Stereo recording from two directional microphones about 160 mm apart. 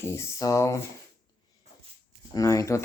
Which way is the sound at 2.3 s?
20° left (ahead or behind).